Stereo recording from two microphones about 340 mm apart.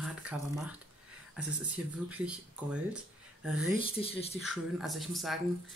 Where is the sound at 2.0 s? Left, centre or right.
Centre.